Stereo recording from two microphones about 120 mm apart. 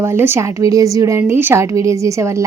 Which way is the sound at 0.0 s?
20° right (ahead or behind).